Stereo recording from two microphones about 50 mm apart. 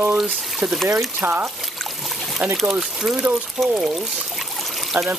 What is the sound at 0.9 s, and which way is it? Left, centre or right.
Speech, right.